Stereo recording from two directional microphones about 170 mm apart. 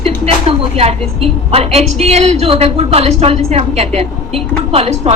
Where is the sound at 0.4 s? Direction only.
35° right (ahead or behind).